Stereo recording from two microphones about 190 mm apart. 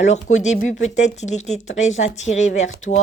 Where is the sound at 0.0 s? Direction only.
40° left (ahead or behind).